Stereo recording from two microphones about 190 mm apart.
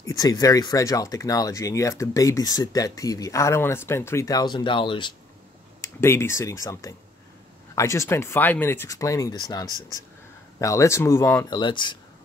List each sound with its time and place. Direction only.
0.0 s speech: 20° left (ahead or behind)
5.9 s speech: 15° left (ahead or behind)